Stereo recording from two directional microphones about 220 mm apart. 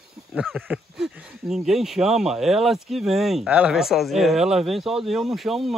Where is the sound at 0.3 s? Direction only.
5° right (ahead or behind).